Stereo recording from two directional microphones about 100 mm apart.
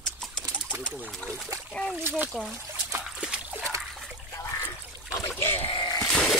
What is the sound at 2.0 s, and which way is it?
Speech, 25° right (ahead or behind).